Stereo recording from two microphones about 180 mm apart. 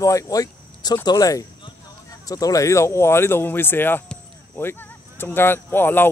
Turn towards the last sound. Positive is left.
turn(degrees=10)  # may be behind; listen again after turning